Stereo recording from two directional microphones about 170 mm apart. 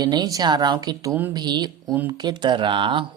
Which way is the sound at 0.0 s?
25° right (ahead or behind).